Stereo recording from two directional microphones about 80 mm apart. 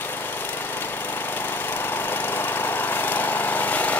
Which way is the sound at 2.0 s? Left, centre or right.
Left.